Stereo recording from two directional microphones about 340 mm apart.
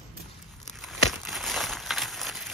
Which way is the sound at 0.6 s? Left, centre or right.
Centre.